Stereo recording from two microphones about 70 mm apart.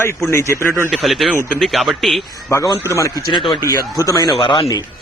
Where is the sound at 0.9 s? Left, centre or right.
Centre.